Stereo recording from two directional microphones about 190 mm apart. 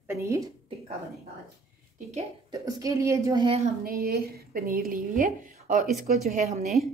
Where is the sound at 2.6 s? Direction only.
15° right (ahead or behind).